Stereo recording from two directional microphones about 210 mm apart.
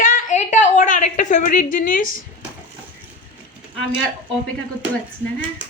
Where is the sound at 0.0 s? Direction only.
35° left (ahead or behind).